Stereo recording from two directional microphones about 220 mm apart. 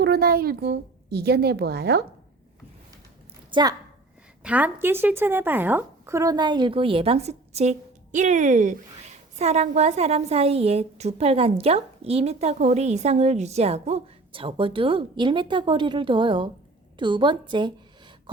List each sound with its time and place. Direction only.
0.0 s speech: 45° right (ahead or behind)
3.5 s a woman's voice: 20° right (ahead or behind)
4.4 s a woman's voice: 5° right (ahead or behind)